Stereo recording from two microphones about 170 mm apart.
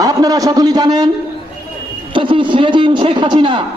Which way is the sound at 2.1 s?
30° right (ahead or behind).